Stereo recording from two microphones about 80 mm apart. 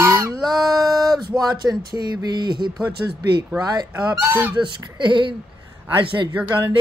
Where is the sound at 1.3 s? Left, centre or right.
Right.